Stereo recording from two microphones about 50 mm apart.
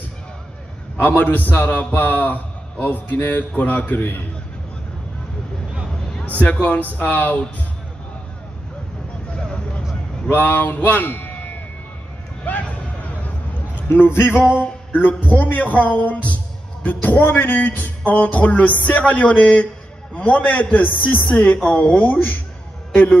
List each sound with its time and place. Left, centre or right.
0.9 s a man's voice: left
6.2 s a man's voice: left
9.3 s vehicle: left
10.3 s a man's voice: left
12.5 s music: left
14.0 s music: left
14.6 s a man's voice: left